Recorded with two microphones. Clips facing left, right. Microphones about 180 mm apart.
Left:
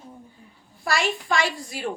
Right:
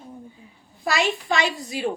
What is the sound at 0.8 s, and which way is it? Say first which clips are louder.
Speech: right 2 dB; 20° right (ahead or behind).